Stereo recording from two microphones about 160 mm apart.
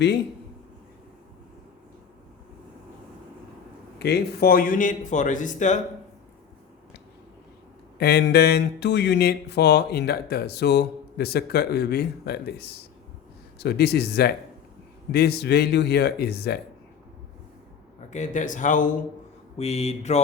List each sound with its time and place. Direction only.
3.9 s speech: 90° left; by 5.8 s 50° left (ahead or behind)
7.9 s speech: 80° left
18.1 s speech: 50° left (ahead or behind)
19.5 s mantra: 40° left (ahead or behind)